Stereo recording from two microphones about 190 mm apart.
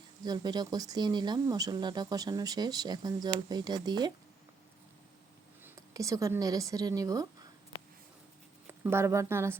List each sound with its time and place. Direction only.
0.3 s speech: 20° right (ahead or behind)
5.6 s speech: 15° right (ahead or behind)
8.6 s speech: 10° right (ahead or behind)